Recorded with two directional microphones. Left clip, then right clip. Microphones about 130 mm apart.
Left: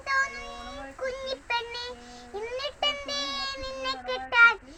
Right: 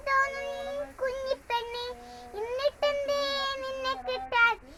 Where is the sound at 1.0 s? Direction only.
30° right (ahead or behind).